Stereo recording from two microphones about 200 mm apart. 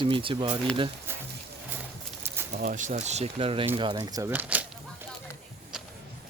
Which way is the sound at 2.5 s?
40° right (ahead or behind).